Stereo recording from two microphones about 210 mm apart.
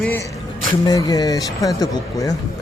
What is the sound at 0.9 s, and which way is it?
Speech, 15° left (ahead or behind).